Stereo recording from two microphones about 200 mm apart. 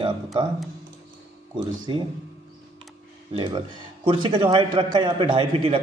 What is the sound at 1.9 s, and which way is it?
Speech, 25° right (ahead or behind).